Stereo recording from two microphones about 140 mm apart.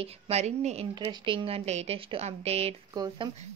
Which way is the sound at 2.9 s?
30° right (ahead or behind).